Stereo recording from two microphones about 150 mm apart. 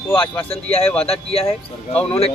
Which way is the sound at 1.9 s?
5° left (ahead or behind).